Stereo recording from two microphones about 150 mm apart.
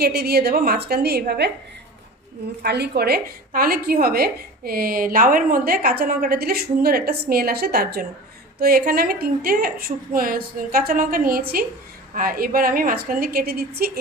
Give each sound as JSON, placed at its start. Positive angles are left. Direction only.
{"t": 0.0, "sound": "a woman's voice", "side_deg": -90}
{"t": 2.6, "sound": "a woman's voice", "side_deg": -90}